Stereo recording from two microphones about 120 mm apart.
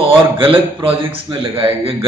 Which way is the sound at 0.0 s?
50° right (ahead or behind).